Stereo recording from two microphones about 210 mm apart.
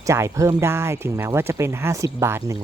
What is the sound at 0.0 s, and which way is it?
Speech, 15° right (ahead or behind).